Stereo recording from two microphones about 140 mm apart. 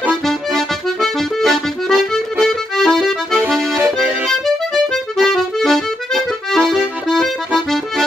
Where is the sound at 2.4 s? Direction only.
Centre (ahead or behind).